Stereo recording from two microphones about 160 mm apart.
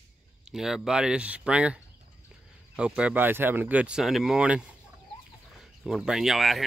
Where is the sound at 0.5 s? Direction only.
5° right (ahead or behind).